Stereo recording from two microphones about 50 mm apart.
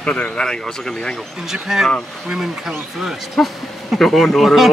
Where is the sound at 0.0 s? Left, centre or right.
Left.